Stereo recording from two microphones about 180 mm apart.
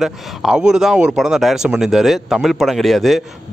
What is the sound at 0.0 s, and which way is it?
Speech, 5° right (ahead or behind).